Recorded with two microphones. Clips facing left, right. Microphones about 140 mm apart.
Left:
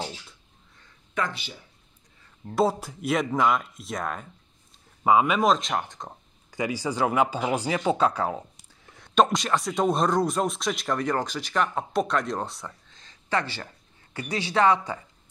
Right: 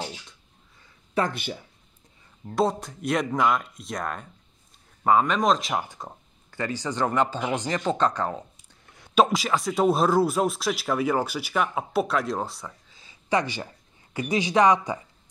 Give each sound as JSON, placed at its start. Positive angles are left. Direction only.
{"t": 1.2, "sound": "speech", "side_deg": -35}
{"t": 2.4, "sound": "speech", "side_deg": 0}
{"t": 6.5, "sound": "speech", "side_deg": 10}